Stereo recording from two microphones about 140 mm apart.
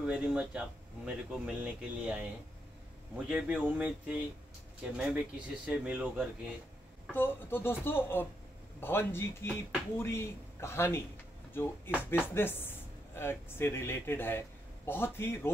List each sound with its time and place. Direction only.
0.0 s speech: 10° right (ahead or behind)
3.3 s speech: 10° right (ahead or behind)
7.1 s speech: 15° left (ahead or behind)